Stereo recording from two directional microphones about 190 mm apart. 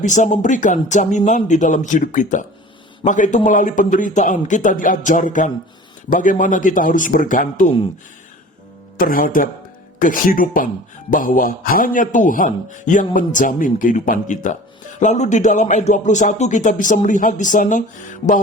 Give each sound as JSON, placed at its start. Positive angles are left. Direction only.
{"t": 0.0, "sound": "a man's voice", "side_deg": 40}
{"t": 9.0, "sound": "a man's voice", "side_deg": 45}